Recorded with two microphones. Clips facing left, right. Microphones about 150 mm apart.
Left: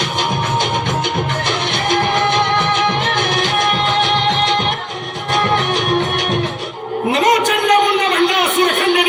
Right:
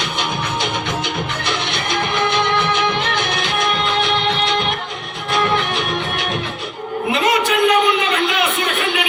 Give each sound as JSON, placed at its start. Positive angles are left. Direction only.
{"t": 0.6, "sound": "music", "side_deg": 45}
{"t": 5.5, "sound": "music", "side_deg": 40}
{"t": 7.1, "sound": "a sound", "side_deg": 40}